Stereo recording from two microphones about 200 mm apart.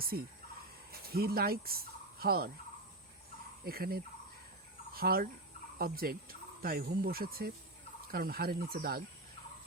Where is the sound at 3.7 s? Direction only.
50° right (ahead or behind).